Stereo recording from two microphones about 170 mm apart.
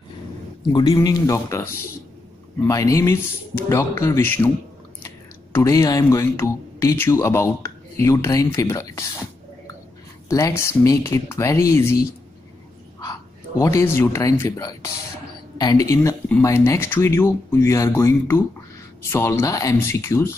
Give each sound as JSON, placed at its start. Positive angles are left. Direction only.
{"t": 0.7, "sound": "speech", "side_deg": 20}
{"t": 5.5, "sound": "speech", "side_deg": 20}
{"t": 10.2, "sound": "speech", "side_deg": 15}
{"t": 13.0, "sound": "speech", "side_deg": 20}